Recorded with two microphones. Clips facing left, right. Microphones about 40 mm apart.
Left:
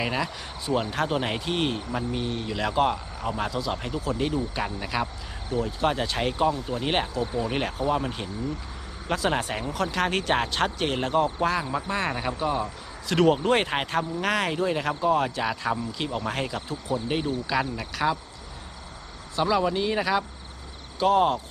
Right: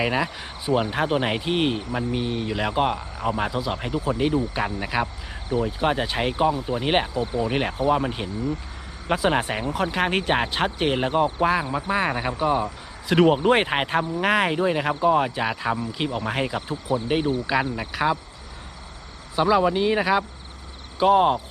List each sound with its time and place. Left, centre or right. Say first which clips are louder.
0.0 s speech: right 4 dB; centre
19.4 s speech: right 4 dB; centre